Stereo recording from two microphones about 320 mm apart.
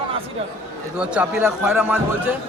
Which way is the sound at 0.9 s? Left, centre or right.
Centre.